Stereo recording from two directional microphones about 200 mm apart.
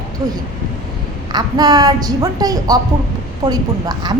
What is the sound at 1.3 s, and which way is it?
A woman's voice, 20° right (ahead or behind).